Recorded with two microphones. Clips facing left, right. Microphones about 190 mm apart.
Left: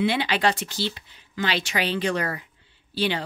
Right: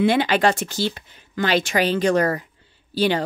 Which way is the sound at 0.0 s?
45° right (ahead or behind).